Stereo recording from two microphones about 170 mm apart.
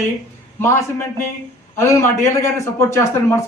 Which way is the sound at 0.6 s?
15° left (ahead or behind).